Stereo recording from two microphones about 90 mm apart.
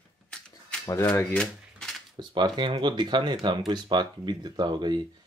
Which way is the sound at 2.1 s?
55° right (ahead or behind).